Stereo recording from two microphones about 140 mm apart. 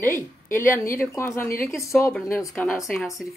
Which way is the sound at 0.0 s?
15° left (ahead or behind).